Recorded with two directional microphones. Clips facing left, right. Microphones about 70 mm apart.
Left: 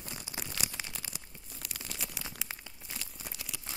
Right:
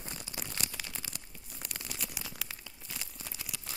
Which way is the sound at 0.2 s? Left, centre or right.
Centre.